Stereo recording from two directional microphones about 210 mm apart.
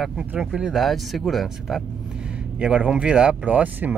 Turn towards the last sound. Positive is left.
turn(degrees=-5)  # may be behind; listen again after turning